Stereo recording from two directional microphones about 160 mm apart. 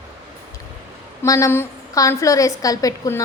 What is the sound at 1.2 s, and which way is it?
A woman's voice, 20° left (ahead or behind).